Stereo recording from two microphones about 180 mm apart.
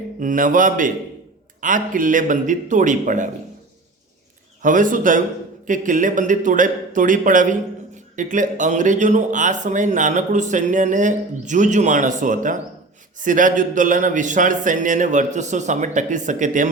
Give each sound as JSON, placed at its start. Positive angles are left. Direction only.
{"t": 0.2, "sound": "speech", "side_deg": -45}
{"t": 4.6, "sound": "speech", "side_deg": -45}